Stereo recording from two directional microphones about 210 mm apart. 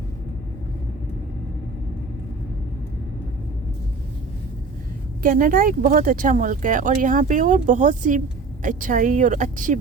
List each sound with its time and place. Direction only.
5.2 s speech: 40° right (ahead or behind)